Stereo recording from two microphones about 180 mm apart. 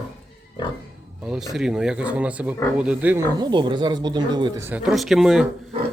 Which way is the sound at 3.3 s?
25° right (ahead or behind).